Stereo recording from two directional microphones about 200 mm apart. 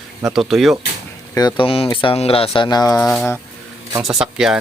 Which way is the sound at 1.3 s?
20° left (ahead or behind).